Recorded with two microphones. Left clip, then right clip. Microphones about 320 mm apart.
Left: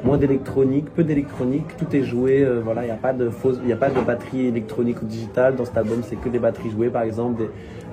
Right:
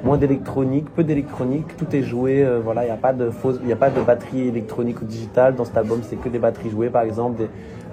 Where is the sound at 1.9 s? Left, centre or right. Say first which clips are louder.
Left 1 dB; centre.